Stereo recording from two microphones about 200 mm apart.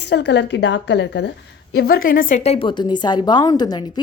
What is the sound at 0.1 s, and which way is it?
A woman's voice, 60° left (ahead or behind).